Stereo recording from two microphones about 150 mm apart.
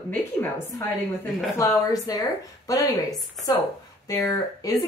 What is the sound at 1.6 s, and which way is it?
A woman's voice, 25° left (ahead or behind).